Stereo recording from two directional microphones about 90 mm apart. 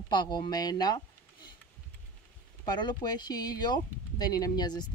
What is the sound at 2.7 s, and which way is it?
Speech, 55° left (ahead or behind).